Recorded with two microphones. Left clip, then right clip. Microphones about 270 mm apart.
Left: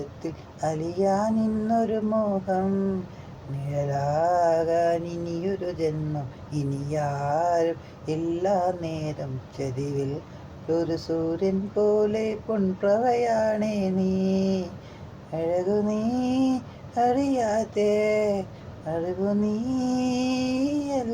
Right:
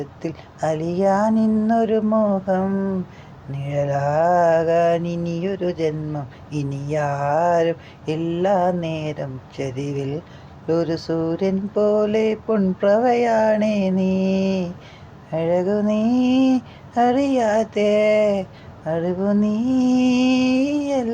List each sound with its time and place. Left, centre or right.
0.2 s mantra: right
3.7 s mantra: right